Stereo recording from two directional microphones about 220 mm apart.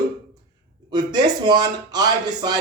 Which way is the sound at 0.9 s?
20° right (ahead or behind).